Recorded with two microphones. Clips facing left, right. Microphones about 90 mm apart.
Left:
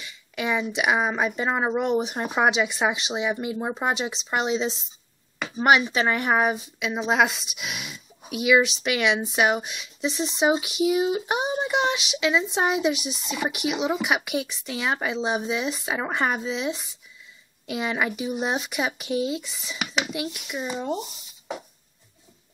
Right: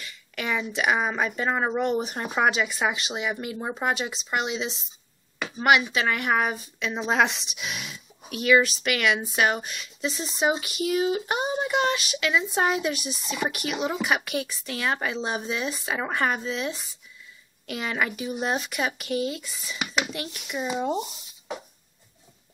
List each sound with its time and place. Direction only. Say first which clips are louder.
0.0 s a sound: left 3 dB; 10° left (ahead or behind)
0.7 s speech: right 1 dB; 10° left (ahead or behind)
4.4 s speech: left 4 dB; 30° left (ahead or behind)
5.9 s speech: left 2 dB; 30° left (ahead or behind)
6.3 s speech: left 3 dB; 15° left (ahead or behind)